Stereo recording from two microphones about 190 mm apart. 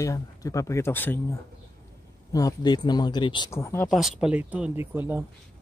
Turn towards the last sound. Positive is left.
turn(degrees=-10)  # may be behind; listen again after turning